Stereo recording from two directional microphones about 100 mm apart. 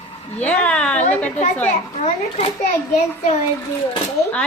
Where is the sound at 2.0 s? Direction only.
90° left.